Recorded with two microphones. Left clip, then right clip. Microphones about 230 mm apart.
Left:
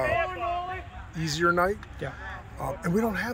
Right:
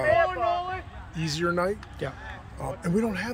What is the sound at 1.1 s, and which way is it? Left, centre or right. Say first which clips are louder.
Speech: left 3 dB; centre.